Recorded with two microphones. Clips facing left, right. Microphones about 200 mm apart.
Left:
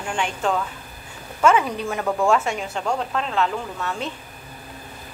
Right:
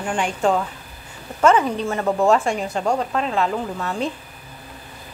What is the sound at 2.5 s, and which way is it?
Speech, 40° right (ahead or behind).